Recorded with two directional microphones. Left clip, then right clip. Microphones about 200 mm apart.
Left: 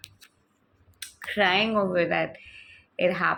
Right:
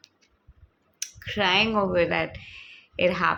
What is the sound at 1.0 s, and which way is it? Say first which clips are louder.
Speech: left 2 dB; 20° right (ahead or behind).